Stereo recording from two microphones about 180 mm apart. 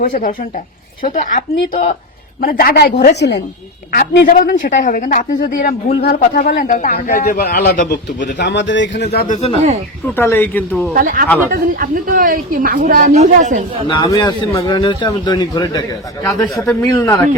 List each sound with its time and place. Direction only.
0.0 s a man's voice: 50° left (ahead or behind); by 3.4 s 70° left (ahead or behind)
4.3 s speech: 50° left (ahead or behind)
8.4 s a man's voice: 70° left (ahead or behind)
9.2 s speech: 40° left (ahead or behind)
9.6 s speech: 40° right (ahead or behind)
10.2 s speech: 10° left (ahead or behind)
10.9 s speech: 50° right (ahead or behind)
13.8 s a man's voice: 25° left (ahead or behind)
16.4 s speech: 5° left (ahead or behind)
16.8 s a man's voice: 20° left (ahead or behind)